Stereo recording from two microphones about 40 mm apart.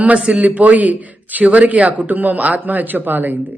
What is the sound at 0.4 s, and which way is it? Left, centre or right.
A man's voice, right.